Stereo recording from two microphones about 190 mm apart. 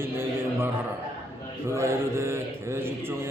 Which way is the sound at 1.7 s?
15° right (ahead or behind).